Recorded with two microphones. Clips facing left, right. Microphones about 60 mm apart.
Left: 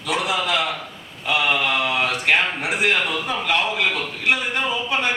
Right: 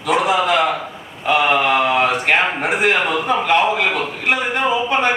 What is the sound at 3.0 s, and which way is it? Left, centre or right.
A man's voice, right.